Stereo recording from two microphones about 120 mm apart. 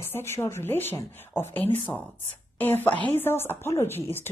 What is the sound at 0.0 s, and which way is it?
Speech, 20° left (ahead or behind).